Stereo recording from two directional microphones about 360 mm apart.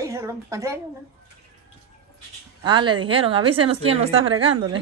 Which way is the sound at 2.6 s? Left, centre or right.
Centre.